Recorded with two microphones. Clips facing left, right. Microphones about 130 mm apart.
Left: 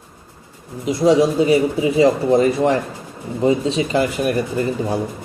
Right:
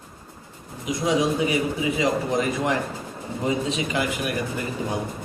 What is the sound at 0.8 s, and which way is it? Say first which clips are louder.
Speech: left 8 dB; 35° left (ahead or behind).